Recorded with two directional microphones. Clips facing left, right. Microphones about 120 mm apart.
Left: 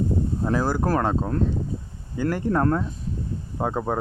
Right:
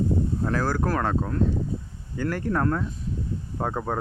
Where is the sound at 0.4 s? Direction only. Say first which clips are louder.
Left 4 dB; 15° left (ahead or behind).